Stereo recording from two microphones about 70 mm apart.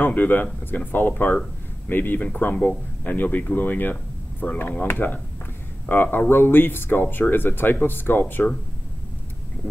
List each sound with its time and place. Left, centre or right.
0.0 s a man's voice: left